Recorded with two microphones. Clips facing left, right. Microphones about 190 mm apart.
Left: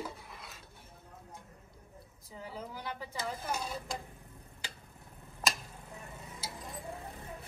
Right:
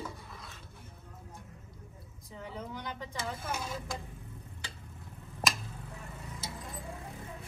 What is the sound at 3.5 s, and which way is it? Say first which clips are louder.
Speech: even; 35° left (ahead or behind).